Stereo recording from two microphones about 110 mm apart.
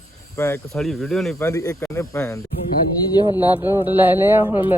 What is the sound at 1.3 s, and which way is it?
Speech, 25° left (ahead or behind).